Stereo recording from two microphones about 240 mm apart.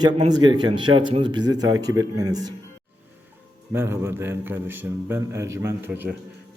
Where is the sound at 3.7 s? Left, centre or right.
Centre.